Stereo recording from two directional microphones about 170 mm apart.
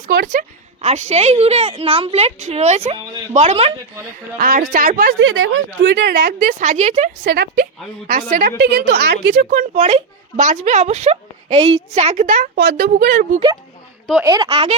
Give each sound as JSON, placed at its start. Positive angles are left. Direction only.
{"t": 0.0, "sound": "speech", "side_deg": -55}
{"t": 0.8, "sound": "a woman's voice", "side_deg": -40}
{"t": 4.4, "sound": "speech", "side_deg": -55}
{"t": 5.8, "sound": "speech", "side_deg": -80}
{"t": 7.3, "sound": "speech", "side_deg": -65}
{"t": 8.0, "sound": "a woman's voice", "side_deg": -55}
{"t": 14.3, "sound": "speech", "side_deg": -20}
{"t": 14.5, "sound": "a woman's voice", "side_deg": -35}